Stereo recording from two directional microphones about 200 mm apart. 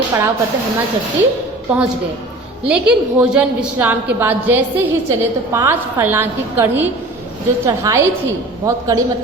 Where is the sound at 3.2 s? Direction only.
5° right (ahead or behind).